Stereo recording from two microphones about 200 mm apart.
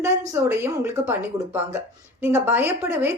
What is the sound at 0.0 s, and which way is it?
A woman's voice, 10° right (ahead or behind).